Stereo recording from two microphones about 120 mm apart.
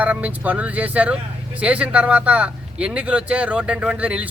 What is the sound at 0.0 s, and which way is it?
Speech, 10° right (ahead or behind).